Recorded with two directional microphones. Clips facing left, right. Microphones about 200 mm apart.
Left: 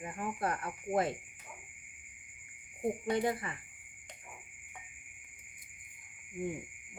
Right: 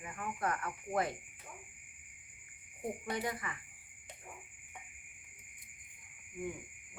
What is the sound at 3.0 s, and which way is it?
Speech, 25° left (ahead or behind).